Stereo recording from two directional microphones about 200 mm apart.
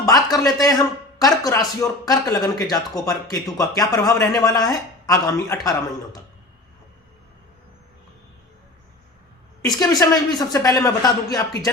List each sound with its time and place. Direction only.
0.0 s speech: 20° left (ahead or behind)
9.6 s speech: 20° left (ahead or behind)